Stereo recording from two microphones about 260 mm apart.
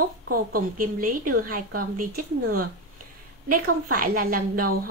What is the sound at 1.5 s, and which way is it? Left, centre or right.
Speech, right.